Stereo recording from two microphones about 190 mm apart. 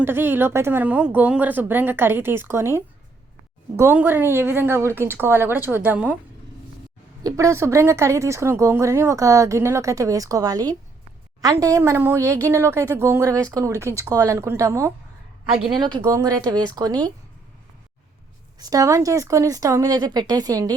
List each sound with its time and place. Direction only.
0.0 s speech: 10° right (ahead or behind)
7.3 s speech: 15° right (ahead or behind)
18.6 s speech: 20° right (ahead or behind)